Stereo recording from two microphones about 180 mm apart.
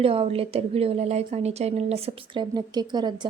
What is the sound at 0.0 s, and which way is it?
A woman's voice, 30° right (ahead or behind).